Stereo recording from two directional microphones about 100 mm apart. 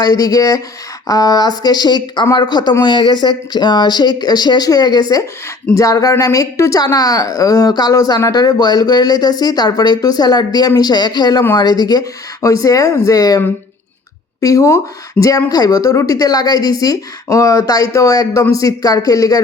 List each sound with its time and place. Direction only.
0.0 s a woman's voice: 40° left (ahead or behind)
14.4 s a woman's voice: 30° left (ahead or behind)